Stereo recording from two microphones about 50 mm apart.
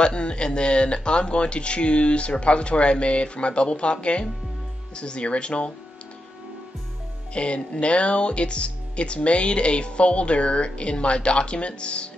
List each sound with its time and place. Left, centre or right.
0.0 s speech: centre
7.3 s speech: left